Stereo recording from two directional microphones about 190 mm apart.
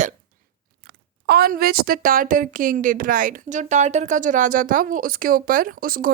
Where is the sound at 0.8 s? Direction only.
55° right (ahead or behind).